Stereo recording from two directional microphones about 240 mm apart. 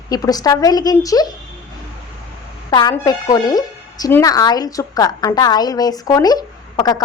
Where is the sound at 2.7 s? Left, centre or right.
Centre.